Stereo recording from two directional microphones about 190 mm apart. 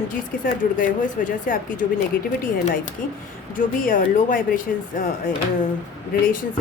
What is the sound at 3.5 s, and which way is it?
Speech, 45° left (ahead or behind).